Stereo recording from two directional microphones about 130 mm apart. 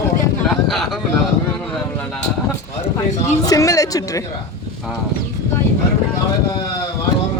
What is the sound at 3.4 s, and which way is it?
Speech, 25° left (ahead or behind).